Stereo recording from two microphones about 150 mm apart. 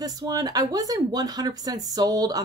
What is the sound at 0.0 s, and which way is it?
Speech, 25° right (ahead or behind).